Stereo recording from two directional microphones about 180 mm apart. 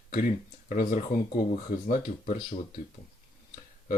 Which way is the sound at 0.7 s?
45° left (ahead or behind).